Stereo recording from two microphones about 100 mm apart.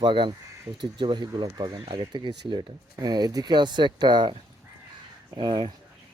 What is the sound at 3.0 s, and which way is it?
Speech, 40° right (ahead or behind).